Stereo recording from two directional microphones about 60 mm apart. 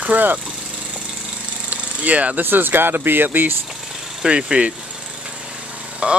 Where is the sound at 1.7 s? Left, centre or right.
Right.